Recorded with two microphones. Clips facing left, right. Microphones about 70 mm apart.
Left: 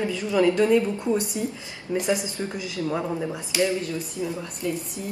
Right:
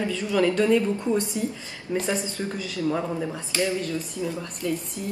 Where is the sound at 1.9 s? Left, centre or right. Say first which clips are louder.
Left 1 dB; centre.